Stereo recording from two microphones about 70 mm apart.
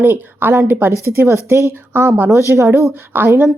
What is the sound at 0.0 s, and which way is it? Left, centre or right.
Speech, right.